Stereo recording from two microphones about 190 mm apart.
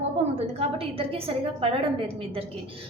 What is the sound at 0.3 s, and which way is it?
Speech, 30° right (ahead or behind).